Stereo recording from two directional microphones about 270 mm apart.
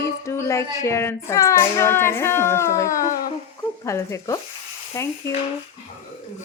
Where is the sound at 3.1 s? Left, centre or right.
Centre.